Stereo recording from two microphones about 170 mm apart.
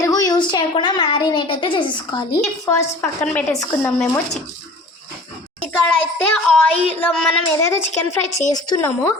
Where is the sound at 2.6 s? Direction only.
15° left (ahead or behind).